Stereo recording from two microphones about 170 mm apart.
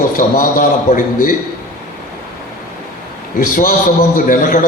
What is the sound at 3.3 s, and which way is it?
A man's voice, 55° left (ahead or behind).